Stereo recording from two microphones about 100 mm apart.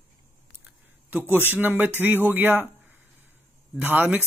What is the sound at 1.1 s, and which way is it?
Speech, 20° right (ahead or behind).